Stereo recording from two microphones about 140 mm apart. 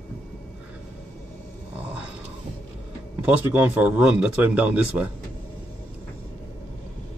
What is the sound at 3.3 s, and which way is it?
Speech, 10° right (ahead or behind).